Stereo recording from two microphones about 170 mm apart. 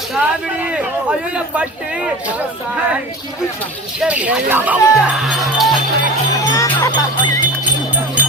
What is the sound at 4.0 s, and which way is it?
A man's voice, 10° right (ahead or behind).